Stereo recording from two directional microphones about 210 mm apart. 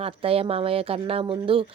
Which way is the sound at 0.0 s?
25° right (ahead or behind).